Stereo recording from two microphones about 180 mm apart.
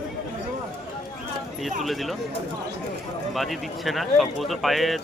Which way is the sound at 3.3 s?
Centre (ahead or behind).